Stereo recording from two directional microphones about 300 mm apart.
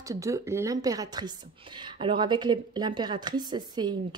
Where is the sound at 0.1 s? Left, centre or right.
Centre.